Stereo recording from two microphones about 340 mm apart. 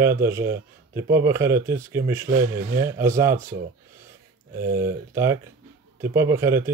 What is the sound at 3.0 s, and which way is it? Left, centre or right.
Speech, centre.